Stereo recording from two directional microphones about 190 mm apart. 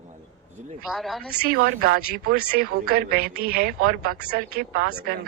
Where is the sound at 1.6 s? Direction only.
50° right (ahead or behind).